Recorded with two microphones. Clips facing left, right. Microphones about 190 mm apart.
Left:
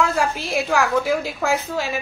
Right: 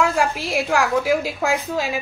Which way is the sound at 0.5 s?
5° right (ahead or behind).